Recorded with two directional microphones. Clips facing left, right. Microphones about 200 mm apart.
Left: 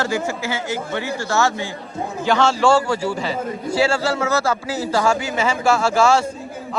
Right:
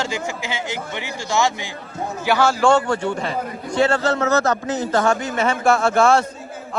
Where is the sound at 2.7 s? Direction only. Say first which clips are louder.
Even; 5° left (ahead or behind).